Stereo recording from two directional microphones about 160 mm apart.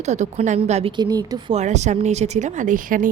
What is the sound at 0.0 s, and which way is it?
Speech, 45° right (ahead or behind).